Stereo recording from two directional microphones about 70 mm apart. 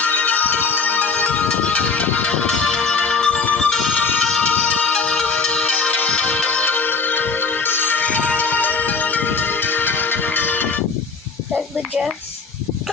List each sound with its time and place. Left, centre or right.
0.0 s music: left
6.7 s music: left